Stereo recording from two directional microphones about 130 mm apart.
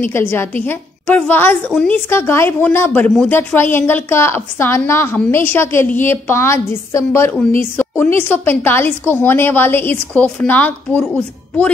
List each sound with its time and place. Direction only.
0.0 s a woman's voice: 15° left (ahead or behind)
1.7 s speech: 5° left (ahead or behind)
2.0 s a woman's voice: 20° left (ahead or behind)